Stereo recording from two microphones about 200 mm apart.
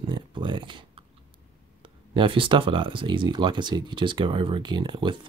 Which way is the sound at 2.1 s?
25° right (ahead or behind).